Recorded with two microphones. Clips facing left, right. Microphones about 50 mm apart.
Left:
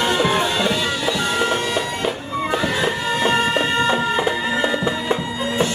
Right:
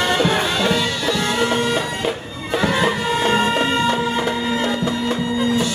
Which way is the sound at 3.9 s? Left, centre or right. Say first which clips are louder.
Left 1 dB; centre.